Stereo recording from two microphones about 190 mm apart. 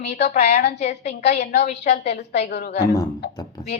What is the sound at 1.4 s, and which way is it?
Speech, 60° left (ahead or behind).